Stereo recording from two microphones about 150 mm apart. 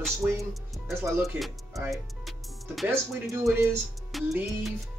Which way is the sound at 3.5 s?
15° right (ahead or behind).